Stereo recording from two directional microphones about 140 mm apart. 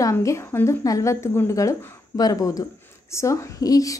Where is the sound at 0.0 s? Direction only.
20° left (ahead or behind).